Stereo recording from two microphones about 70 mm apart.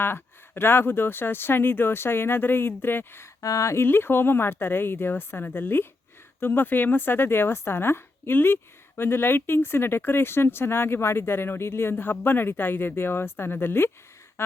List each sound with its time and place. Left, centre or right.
0.0 s speech: left
3.4 s speech: left
3.8 s speech: left
14.4 s a sound: left